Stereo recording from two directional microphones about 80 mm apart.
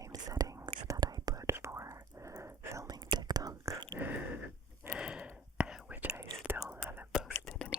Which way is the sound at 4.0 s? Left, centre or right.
Right.